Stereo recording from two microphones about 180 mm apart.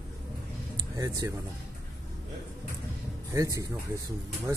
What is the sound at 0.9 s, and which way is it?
Speech, 20° right (ahead or behind).